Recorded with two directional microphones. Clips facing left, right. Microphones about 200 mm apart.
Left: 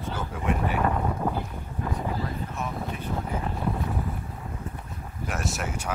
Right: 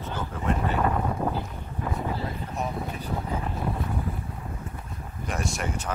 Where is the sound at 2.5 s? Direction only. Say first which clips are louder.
Right 1 dB; 35° right (ahead or behind).